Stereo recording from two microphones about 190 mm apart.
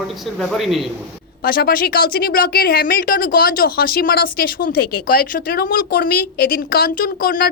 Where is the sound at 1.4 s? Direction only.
50° left (ahead or behind).